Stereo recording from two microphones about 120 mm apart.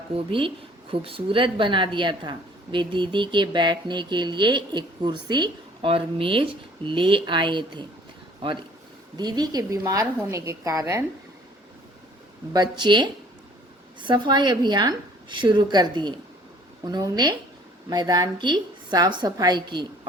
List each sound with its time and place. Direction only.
0.2 s a woman's voice: 50° right (ahead or behind); by 11.0 s 25° right (ahead or behind)
12.5 s speech: 40° right (ahead or behind)